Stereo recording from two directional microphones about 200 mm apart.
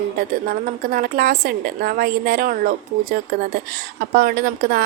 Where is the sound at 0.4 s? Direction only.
45° right (ahead or behind).